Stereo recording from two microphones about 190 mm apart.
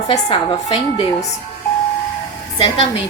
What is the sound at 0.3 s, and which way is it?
Speech, 30° left (ahead or behind).